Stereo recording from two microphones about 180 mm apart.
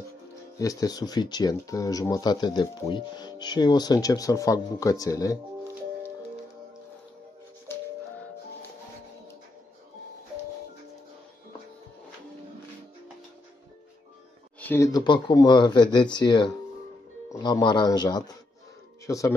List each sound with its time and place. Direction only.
0.6 s speech: 20° left (ahead or behind)
14.6 s a sound: 10° left (ahead or behind)
14.9 s speech: 25° left (ahead or behind)